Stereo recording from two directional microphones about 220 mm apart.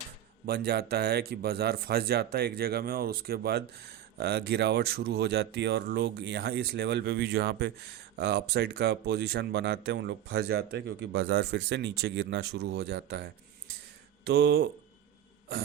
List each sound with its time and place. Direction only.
0.4 s speech: 45° right (ahead or behind)
14.3 s speech: 50° right (ahead or behind)